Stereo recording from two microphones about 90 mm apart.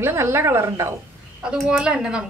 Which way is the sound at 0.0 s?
25° right (ahead or behind).